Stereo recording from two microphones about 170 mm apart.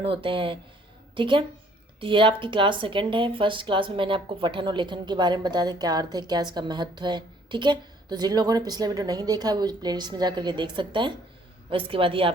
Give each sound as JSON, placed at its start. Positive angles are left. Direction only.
{"t": 0.0, "sound": "a woman's voice", "side_deg": -30}